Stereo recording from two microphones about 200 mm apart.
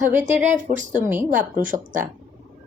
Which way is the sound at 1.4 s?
40° right (ahead or behind).